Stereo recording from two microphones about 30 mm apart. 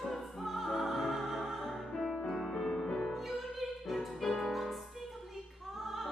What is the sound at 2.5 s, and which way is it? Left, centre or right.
Music, centre.